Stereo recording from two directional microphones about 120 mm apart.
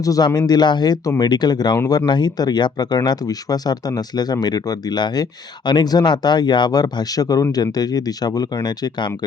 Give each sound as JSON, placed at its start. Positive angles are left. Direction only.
{"t": 0.0, "sound": "speech", "side_deg": 30}